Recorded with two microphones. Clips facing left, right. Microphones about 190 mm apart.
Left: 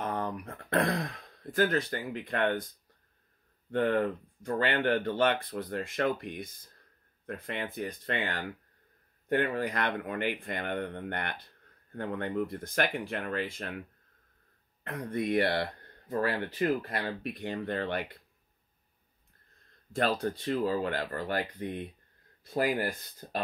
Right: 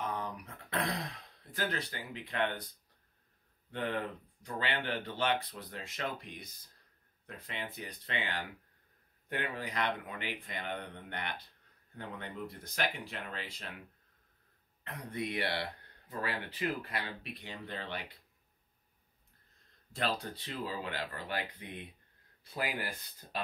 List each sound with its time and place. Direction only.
0.0 s throat clearing: 55° left (ahead or behind)
3.7 s speech: 50° left (ahead or behind)
14.8 s speech: 50° left (ahead or behind)
19.9 s speech: 50° left (ahead or behind)